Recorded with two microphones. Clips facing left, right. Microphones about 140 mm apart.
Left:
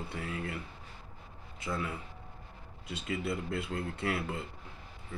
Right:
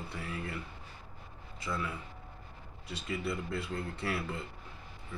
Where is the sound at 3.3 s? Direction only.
55° left (ahead or behind).